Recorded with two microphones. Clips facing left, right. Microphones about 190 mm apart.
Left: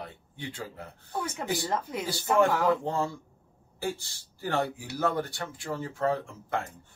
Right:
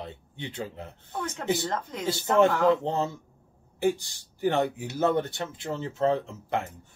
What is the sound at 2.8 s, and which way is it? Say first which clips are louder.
Speech: right 2 dB; 20° right (ahead or behind).